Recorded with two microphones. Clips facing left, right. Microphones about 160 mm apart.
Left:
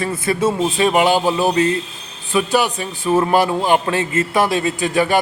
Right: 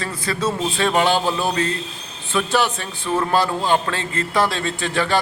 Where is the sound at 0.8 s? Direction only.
10° left (ahead or behind).